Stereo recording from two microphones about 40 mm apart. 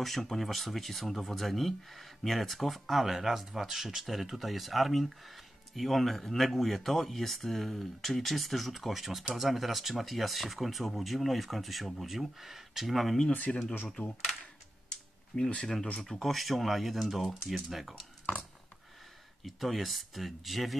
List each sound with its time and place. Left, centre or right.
0.0 s speech: centre
13.5 s speech: left
15.6 s speech: centre
19.4 s speech: centre